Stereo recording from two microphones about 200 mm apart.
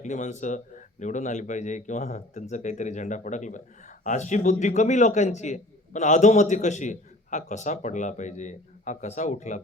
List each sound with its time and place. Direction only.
0.0 s a man's voice: 35° left (ahead or behind)